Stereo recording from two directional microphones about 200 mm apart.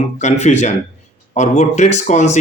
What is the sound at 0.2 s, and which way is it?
Speech, 35° left (ahead or behind).